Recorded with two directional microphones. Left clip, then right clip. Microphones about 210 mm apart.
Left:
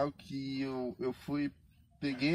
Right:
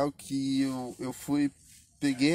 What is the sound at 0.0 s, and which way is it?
Speech, 50° right (ahead or behind).